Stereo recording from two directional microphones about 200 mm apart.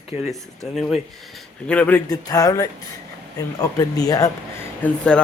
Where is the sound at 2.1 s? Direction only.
20° left (ahead or behind).